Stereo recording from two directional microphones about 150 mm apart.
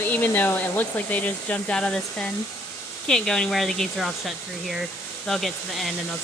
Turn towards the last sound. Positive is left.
turn(degrees=0)  # may be behind; listen again after turning